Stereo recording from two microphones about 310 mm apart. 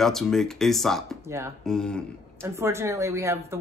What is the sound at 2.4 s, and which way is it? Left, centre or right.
Speech, centre.